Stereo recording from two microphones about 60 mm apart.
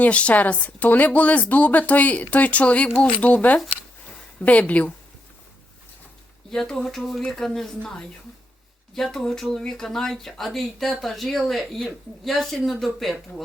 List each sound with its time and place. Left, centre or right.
0.0 s speech: left
6.5 s a woman's voice: centre